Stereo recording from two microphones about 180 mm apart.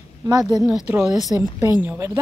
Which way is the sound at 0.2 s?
20° right (ahead or behind).